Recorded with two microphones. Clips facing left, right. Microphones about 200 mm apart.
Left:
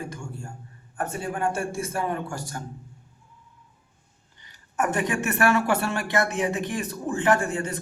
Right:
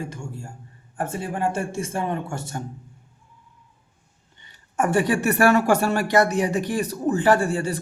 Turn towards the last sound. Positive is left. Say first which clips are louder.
# right 3 dB
turn(degrees=-35)  # may be behind; listen again after turning